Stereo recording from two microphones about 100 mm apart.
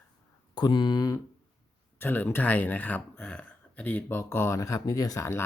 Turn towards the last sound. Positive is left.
turn(degrees=30)  # may be behind; listen again after turning